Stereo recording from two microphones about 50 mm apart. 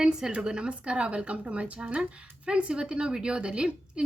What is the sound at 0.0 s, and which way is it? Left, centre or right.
Speech, centre.